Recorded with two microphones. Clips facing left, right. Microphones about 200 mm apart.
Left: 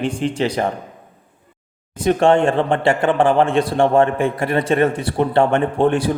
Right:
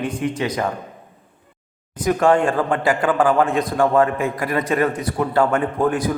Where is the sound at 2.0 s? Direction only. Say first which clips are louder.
Left 2 dB; 25° left (ahead or behind).